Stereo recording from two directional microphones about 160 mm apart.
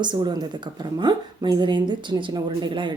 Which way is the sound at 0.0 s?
30° right (ahead or behind).